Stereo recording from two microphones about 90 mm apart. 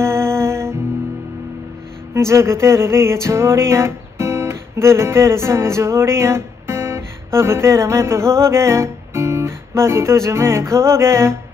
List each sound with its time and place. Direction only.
0.0 s music: 30° right (ahead or behind)
2.1 s music: 30° right (ahead or behind)